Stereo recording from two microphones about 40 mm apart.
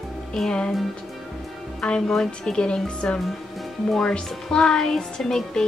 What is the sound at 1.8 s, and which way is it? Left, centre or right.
Speech, left.